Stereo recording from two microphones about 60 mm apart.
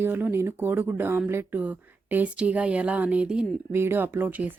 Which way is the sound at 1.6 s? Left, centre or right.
Right.